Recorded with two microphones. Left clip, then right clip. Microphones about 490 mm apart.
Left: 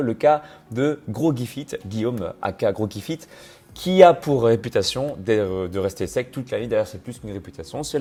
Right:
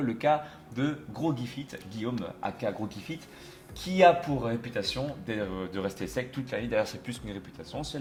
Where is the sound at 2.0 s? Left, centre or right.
Left.